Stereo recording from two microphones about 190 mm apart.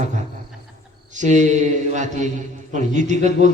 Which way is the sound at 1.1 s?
40° right (ahead or behind).